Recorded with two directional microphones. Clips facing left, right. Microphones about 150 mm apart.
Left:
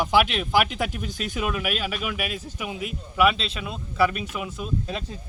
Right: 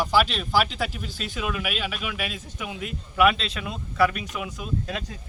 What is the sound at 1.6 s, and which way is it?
Speech, 45° left (ahead or behind).